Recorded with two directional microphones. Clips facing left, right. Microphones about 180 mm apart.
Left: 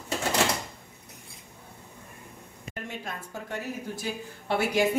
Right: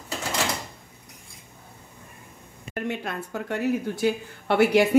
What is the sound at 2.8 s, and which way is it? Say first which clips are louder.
A woman's voice: right 8 dB; 70° right (ahead or behind).